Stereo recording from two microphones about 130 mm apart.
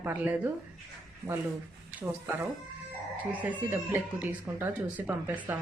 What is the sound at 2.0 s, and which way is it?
Speech, 15° right (ahead or behind).